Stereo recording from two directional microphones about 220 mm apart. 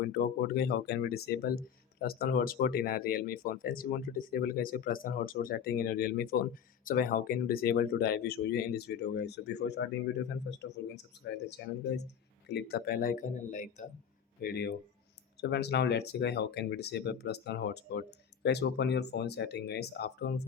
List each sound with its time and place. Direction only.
0.0 s speech: 45° left (ahead or behind)
14.4 s speech: 50° left (ahead or behind)